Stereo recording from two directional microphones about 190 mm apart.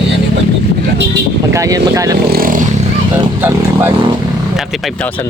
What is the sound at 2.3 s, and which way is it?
Speech, 50° right (ahead or behind).